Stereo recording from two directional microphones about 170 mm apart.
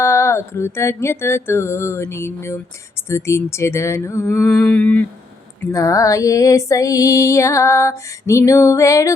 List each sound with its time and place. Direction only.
0.0 s music: 15° left (ahead or behind)
4.5 s music: 5° left (ahead or behind)
5.7 s music: 20° left (ahead or behind)